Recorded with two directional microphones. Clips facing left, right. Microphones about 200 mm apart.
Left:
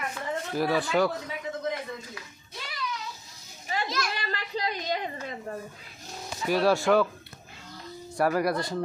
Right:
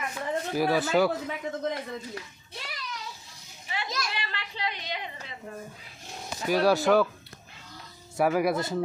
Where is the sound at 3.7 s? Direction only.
40° left (ahead or behind).